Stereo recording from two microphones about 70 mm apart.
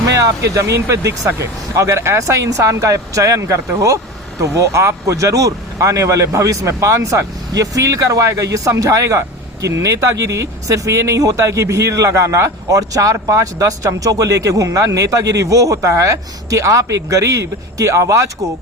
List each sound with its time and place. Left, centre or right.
0.2 s speech: right